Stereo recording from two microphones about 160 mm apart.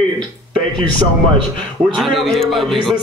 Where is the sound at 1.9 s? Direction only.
Centre (ahead or behind).